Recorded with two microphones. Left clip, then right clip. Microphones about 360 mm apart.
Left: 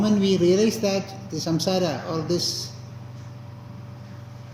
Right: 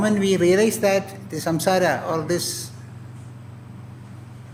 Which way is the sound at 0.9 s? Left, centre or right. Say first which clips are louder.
Right 5 dB; right.